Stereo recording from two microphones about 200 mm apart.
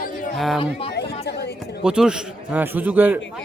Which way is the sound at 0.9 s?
55° left (ahead or behind).